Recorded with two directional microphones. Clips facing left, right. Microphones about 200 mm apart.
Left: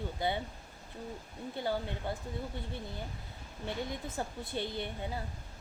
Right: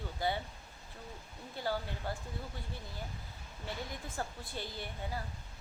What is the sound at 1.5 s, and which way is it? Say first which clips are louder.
Speech: left 2 dB; 20° left (ahead or behind).